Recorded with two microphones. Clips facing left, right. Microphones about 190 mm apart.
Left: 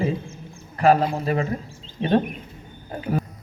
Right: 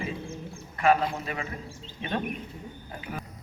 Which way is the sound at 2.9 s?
35° left (ahead or behind).